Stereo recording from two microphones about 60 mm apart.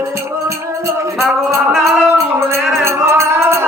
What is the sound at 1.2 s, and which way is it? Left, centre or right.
Music, centre.